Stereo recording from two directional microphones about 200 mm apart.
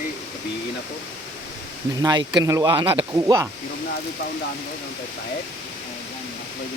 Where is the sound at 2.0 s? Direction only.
20° right (ahead or behind).